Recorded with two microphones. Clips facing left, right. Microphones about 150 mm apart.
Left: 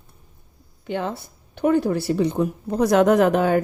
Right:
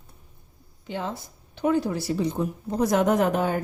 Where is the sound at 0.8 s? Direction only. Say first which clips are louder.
Left 5 dB; 60° left (ahead or behind).